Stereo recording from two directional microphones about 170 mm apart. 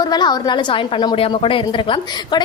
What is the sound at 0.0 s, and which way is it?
A woman's voice, 25° left (ahead or behind).